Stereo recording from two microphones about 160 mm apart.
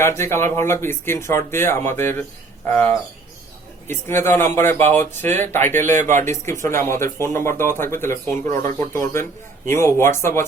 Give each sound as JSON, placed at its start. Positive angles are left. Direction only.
{"t": 0.0, "sound": "speech", "side_deg": 15}
{"t": 3.8, "sound": "speech", "side_deg": 15}
{"t": 6.0, "sound": "speech", "side_deg": -50}
{"t": 6.2, "sound": "speech", "side_deg": 15}